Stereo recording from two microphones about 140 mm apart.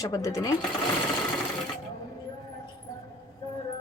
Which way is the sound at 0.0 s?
25° left (ahead or behind).